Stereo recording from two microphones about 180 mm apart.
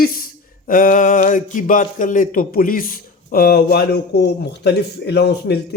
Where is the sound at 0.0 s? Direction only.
55° left (ahead or behind).